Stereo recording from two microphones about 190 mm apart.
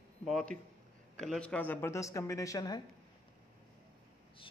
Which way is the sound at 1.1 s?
5° left (ahead or behind).